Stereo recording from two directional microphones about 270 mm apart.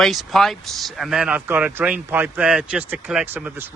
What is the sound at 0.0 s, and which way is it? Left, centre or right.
Speech, centre.